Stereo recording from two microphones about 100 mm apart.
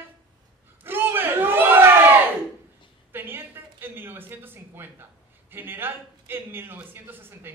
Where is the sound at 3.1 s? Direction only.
20° right (ahead or behind).